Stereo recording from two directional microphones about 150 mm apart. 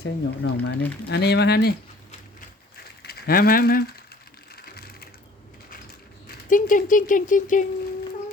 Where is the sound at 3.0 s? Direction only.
90° left.